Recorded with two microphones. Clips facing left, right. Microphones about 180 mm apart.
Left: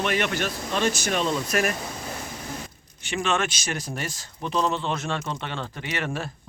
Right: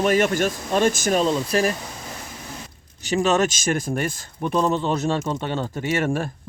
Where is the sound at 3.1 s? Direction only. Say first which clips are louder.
Right 6 dB; 40° right (ahead or behind).